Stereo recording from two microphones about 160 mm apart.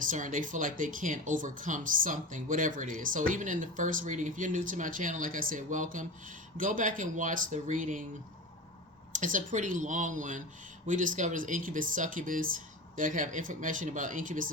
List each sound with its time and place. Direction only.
0.1 s speech: 55° right (ahead or behind)
9.1 s speech: 55° right (ahead or behind)